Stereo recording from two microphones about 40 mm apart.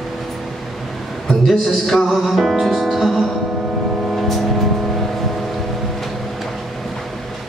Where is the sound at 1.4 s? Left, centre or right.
Centre.